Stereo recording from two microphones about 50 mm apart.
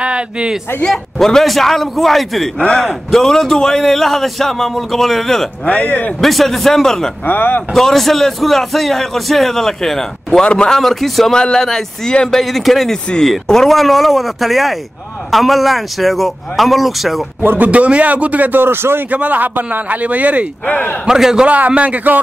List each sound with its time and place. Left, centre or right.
0.0 s speech: right
0.8 s a man's voice: centre
2.6 s a man's voice: centre
5.7 s speech: left
6.2 s a man's voice: centre
7.2 s speech: left
7.7 s a man's voice: centre
10.8 s a man's voice: centre
17.4 s speech: right
17.6 s speech: right
19.0 s speech: right
20.6 s speech: left
21.0 s a man's voice: centre
21.5 s speech: right